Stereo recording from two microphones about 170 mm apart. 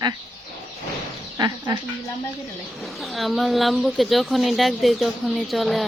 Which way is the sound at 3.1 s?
Centre (ahead or behind).